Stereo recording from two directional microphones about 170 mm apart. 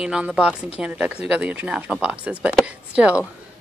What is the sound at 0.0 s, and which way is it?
A woman's voice, 5° right (ahead or behind).